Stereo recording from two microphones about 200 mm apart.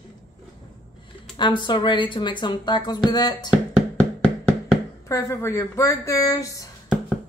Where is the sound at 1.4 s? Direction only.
25° left (ahead or behind).